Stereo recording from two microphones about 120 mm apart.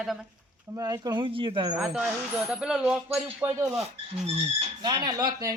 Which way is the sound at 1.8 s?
5° right (ahead or behind).